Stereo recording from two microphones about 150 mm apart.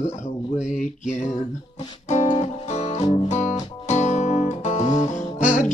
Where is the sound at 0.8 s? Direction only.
55° left (ahead or behind).